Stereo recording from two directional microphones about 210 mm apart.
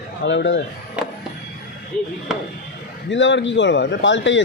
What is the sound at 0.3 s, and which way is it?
Speech, 60° left (ahead or behind).